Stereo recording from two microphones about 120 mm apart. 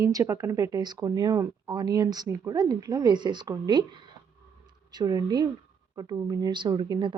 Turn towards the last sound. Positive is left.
turn(degrees=-40)  # may be behind; listen again after turning